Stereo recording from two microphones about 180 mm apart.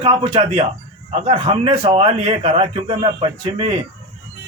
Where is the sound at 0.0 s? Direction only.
30° right (ahead or behind).